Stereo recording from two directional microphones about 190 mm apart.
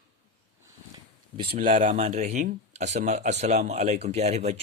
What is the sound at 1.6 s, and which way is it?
Speech, 40° right (ahead or behind).